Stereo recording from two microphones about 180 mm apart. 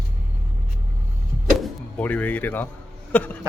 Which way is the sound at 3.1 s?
10° left (ahead or behind).